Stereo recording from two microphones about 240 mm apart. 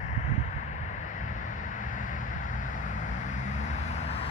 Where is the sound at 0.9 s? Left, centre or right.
Left.